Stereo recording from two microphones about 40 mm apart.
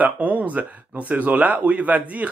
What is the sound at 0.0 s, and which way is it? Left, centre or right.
Speech, right.